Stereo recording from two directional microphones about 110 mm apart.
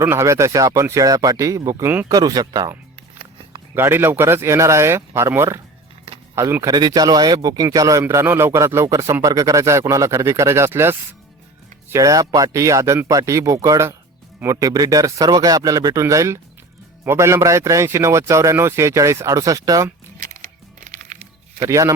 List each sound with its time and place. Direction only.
0.0 s a man's voice: 25° right (ahead or behind)
1.8 s a man's voice: 20° right (ahead or behind)
2.0 s speech: 35° right (ahead or behind)
3.8 s a man's voice: 20° right (ahead or behind)
21.6 s a man's voice: 30° right (ahead or behind)